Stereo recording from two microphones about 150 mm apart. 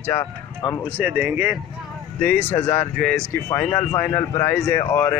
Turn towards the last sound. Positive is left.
turn(degrees=15)  # may be behind; listen again after turning